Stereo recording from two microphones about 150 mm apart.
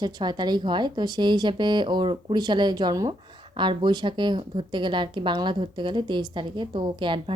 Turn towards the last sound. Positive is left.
turn(degrees=-30)  # may be behind; listen again after turning